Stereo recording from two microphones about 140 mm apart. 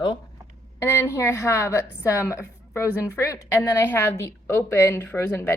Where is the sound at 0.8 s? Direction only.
20° left (ahead or behind).